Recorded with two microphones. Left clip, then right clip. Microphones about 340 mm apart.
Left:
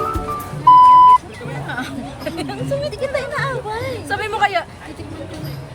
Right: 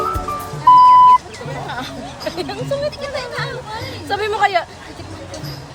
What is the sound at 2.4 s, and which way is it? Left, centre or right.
Goat, centre.